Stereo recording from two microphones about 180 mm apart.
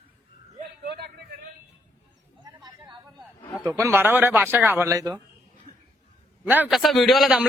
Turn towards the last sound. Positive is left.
turn(degrees=0)  # may be behind; listen again after turning